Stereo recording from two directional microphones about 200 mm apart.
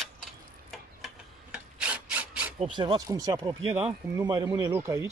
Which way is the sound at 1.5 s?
5° right (ahead or behind).